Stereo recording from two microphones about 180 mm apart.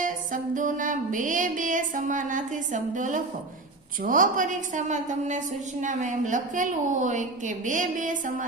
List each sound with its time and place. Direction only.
0.5 s a woman's voice: 45° right (ahead or behind)